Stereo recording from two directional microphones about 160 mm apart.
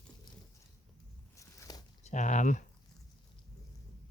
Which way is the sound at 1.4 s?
20° left (ahead or behind).